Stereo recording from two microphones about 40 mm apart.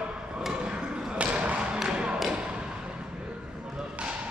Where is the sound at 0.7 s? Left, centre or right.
Right.